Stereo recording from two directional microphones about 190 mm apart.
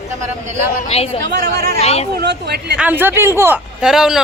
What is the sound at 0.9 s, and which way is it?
Speech, 35° left (ahead or behind).